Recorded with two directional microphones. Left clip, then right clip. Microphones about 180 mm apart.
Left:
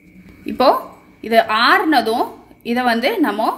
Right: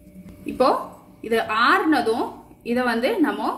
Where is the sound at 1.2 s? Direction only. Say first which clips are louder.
Left 6 dB; 45° left (ahead or behind).